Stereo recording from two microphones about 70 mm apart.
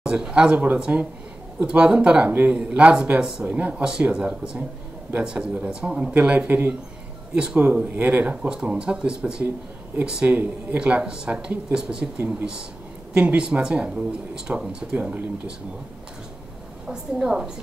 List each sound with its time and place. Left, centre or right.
0.0 s speech: centre
13.1 s speech: centre
16.8 s speech: centre